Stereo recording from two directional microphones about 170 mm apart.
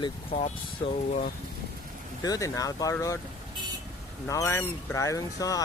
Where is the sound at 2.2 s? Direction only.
20° left (ahead or behind).